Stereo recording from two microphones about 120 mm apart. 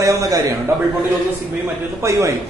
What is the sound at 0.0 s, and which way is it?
Speech, 25° right (ahead or behind).